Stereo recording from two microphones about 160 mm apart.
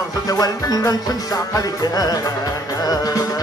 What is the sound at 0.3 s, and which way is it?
Music, 20° left (ahead or behind).